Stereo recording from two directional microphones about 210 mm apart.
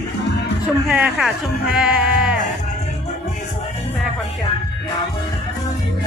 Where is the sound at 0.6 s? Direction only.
5° right (ahead or behind).